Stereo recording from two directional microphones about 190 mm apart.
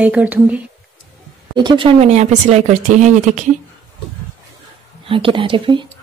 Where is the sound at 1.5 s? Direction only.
25° right (ahead or behind).